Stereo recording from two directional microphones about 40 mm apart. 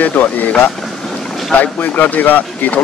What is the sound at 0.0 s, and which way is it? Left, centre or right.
Speech, left.